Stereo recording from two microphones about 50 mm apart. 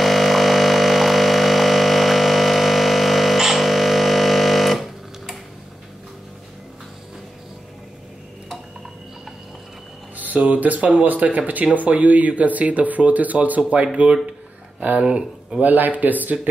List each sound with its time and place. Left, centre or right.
0.0 s a sound: centre
10.1 s speech: right
15.6 s speech: right